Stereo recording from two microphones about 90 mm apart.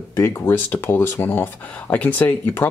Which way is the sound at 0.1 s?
30° left (ahead or behind).